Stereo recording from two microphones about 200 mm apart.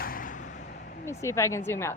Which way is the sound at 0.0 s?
45° left (ahead or behind).